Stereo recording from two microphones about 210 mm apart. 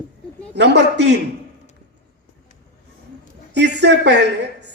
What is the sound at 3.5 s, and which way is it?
Speech, 55° right (ahead or behind).